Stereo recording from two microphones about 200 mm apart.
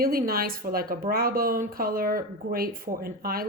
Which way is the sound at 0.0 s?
45° right (ahead or behind).